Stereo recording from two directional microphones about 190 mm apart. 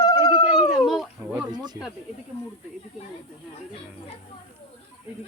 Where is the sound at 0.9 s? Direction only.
Centre (ahead or behind).